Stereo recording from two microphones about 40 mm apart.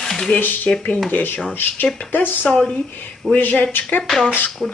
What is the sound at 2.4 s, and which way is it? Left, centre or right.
Speech, centre.